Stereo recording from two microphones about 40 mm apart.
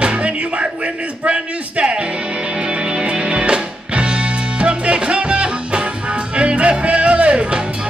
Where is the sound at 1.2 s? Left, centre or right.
Right.